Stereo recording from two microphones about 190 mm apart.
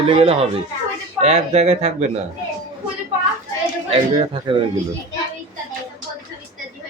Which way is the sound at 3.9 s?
30° right (ahead or behind).